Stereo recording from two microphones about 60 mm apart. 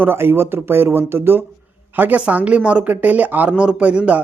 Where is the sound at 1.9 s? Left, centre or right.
Right.